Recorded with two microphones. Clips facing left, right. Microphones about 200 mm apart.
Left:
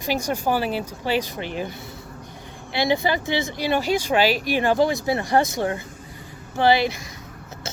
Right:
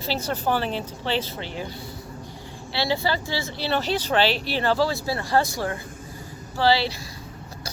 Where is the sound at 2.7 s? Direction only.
15° left (ahead or behind).